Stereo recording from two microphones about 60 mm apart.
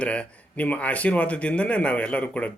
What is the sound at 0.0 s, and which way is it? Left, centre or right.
A man's voice, left.